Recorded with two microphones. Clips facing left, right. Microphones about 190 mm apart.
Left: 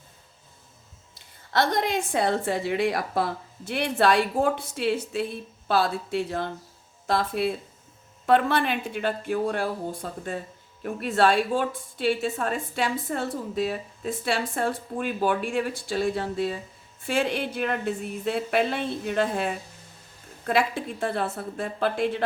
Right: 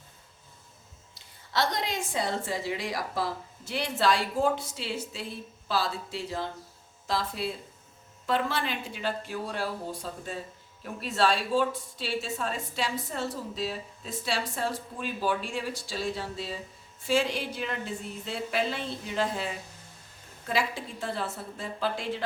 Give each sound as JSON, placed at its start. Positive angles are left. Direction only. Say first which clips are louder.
{"t": 1.5, "sound": "a woman's voice", "louder": "left 5 dB", "side_deg": 55}